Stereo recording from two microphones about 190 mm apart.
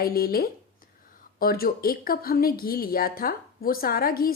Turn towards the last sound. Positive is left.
turn(degrees=50)  # may be behind; listen again after turning